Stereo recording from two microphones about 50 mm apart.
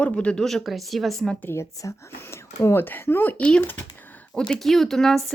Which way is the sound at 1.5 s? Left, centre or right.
Left.